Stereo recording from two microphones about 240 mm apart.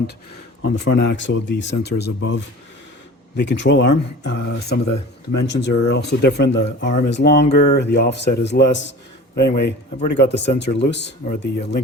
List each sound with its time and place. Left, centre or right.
0.6 s a man's voice: left